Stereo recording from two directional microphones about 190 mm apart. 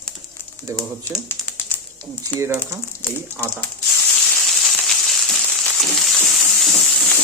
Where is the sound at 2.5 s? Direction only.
15° left (ahead or behind).